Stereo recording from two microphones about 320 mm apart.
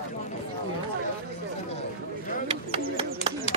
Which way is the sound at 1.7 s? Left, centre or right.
Left.